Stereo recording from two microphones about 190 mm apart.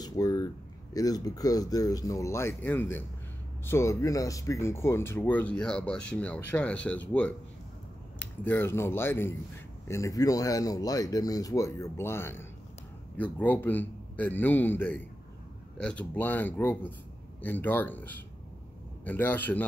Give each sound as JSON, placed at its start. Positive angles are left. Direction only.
{"t": 0.0, "sound": "a sound", "side_deg": 20}
{"t": 0.9, "sound": "speech", "side_deg": 20}
{"t": 8.5, "sound": "speech", "side_deg": 10}